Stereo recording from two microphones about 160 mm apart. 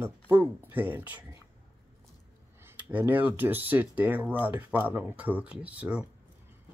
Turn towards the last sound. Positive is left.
turn(degrees=-10)  # may be behind; listen again after turning